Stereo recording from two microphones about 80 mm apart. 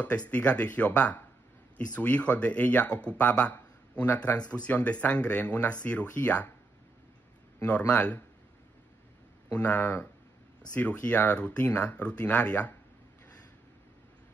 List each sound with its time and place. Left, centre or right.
0.3 s speech: centre
7.6 s speech: centre
9.5 s speech: centre